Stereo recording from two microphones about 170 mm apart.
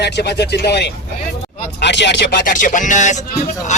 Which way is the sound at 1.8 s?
90° left.